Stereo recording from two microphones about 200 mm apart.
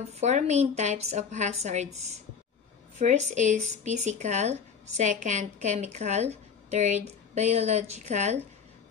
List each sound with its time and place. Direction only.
0.2 s speech: 35° right (ahead or behind)